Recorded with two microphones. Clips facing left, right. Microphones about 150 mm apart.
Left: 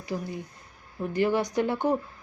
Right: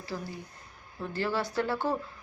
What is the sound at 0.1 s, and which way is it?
A woman's voice, 20° left (ahead or behind).